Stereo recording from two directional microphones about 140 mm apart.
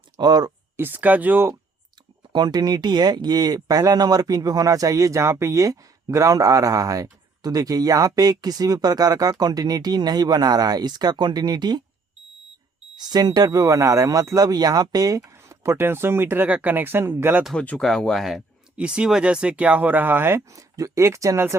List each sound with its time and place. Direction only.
0.2 s speech: 30° right (ahead or behind)
0.8 s speech: 15° right (ahead or behind)
2.3 s speech: 30° right (ahead or behind)
13.0 s speech: 30° right (ahead or behind)
17.4 s speech: 5° left (ahead or behind); by 21.5 s 20° right (ahead or behind)